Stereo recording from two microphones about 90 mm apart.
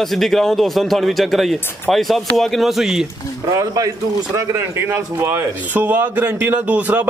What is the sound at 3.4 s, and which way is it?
Speech, 40° right (ahead or behind).